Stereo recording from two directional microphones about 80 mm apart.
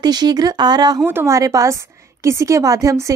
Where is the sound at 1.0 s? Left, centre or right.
Right.